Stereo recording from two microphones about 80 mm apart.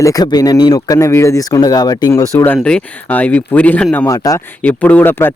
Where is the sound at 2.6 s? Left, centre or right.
Centre.